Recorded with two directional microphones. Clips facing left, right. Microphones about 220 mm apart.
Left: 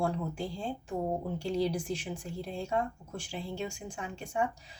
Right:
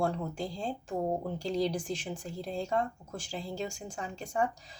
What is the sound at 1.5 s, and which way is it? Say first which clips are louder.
Speech: even; 5° left (ahead or behind).